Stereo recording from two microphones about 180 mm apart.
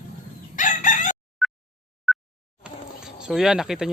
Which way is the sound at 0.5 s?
45° left (ahead or behind).